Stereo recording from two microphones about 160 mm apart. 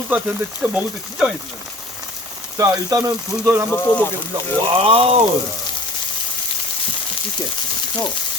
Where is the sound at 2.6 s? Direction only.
20° right (ahead or behind).